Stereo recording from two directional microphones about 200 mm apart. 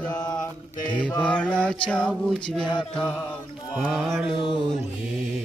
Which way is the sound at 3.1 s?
5° left (ahead or behind).